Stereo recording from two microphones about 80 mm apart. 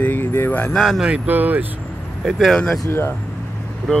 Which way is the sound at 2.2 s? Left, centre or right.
Centre.